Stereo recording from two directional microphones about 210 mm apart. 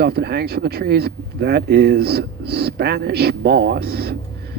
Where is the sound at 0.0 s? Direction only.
50° right (ahead or behind).